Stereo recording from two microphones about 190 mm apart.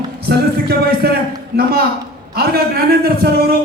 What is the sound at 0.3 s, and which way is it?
Speech, 55° right (ahead or behind).